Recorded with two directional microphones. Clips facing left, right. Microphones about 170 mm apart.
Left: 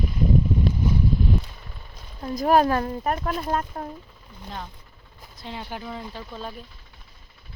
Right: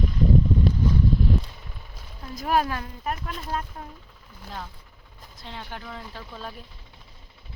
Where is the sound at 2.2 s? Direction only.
40° left (ahead or behind).